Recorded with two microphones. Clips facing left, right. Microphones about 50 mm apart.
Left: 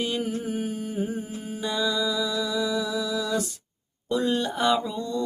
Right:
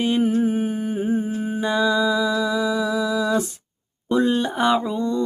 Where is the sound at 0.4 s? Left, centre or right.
Right.